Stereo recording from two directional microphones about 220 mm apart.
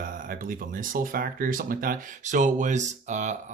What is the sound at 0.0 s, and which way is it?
Speech, 40° right (ahead or behind).